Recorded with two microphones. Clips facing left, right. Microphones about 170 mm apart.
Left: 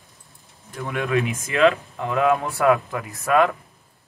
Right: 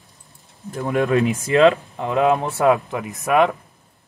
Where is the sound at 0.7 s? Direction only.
35° right (ahead or behind).